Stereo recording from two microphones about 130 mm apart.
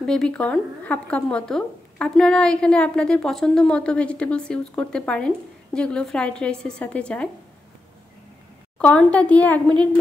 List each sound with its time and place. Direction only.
0.0 s speech: 5° left (ahead or behind)
8.7 s speech: 10° left (ahead or behind)